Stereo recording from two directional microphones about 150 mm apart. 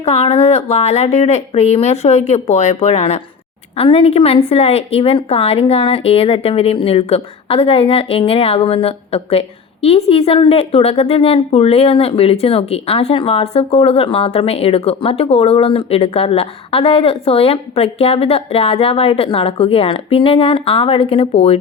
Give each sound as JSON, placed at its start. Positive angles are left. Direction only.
{"t": 0.0, "sound": "a woman's voice", "side_deg": 40}